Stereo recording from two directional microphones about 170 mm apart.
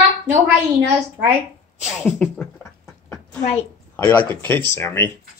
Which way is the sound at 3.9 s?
10° left (ahead or behind).